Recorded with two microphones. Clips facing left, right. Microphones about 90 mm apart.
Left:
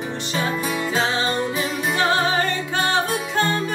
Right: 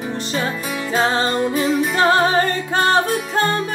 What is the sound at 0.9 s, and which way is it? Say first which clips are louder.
Music: right 6 dB; 40° right (ahead or behind).